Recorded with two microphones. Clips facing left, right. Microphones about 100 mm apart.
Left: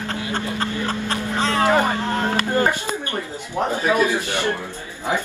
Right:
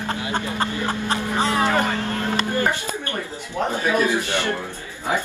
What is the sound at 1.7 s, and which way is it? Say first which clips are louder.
Speech: left 3 dB; 15° left (ahead or behind).